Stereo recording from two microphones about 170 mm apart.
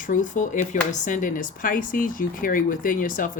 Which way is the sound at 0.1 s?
50° left (ahead or behind).